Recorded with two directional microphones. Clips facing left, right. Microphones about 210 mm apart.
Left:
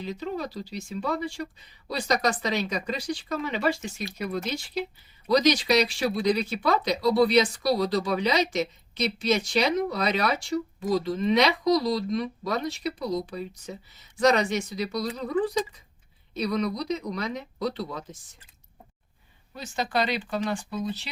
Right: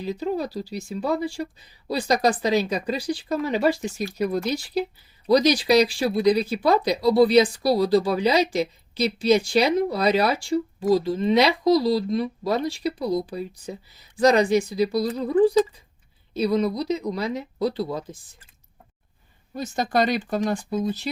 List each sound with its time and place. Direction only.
0.0 s speech: 35° right (ahead or behind)
19.5 s speech: 45° right (ahead or behind)